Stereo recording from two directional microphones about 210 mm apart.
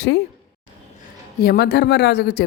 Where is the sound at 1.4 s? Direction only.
50° left (ahead or behind).